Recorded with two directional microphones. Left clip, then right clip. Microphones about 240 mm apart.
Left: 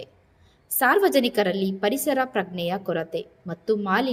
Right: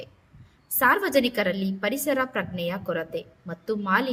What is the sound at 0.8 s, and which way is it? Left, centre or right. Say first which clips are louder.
A woman's voice: left 2 dB; centre.